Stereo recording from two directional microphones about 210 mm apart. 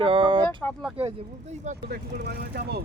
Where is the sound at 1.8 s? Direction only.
50° right (ahead or behind).